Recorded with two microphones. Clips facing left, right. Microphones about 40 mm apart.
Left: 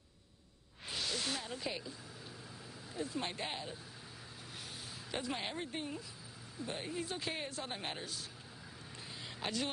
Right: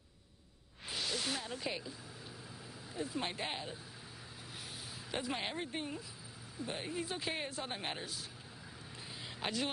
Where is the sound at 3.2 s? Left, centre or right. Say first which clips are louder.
Right 2 dB; centre.